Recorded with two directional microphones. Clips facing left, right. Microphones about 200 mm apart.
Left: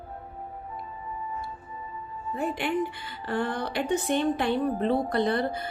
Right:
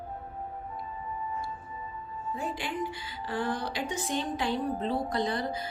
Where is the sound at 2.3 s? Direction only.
60° left (ahead or behind).